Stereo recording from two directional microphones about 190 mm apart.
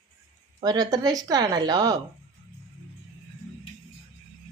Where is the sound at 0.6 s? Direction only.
20° right (ahead or behind).